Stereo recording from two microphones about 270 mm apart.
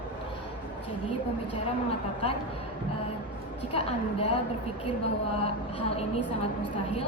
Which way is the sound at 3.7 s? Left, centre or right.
Left.